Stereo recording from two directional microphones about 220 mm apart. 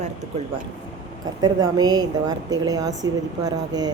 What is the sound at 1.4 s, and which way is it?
A woman's voice, 20° right (ahead or behind).